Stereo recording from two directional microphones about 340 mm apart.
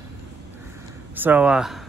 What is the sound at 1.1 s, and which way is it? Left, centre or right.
Speech, centre.